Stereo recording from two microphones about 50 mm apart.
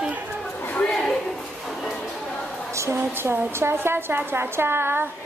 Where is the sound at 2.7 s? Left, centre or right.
Right.